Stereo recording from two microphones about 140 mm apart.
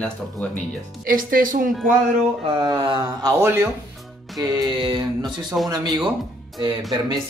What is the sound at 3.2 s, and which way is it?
Speech, 20° right (ahead or behind).